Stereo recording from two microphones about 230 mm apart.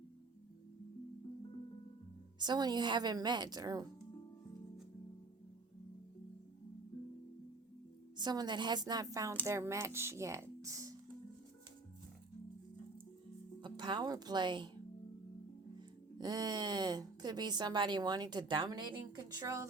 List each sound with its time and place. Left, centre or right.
2.4 s a woman's voice: centre
8.1 s a woman's voice: centre
13.6 s speech: centre
16.1 s a woman's voice: centre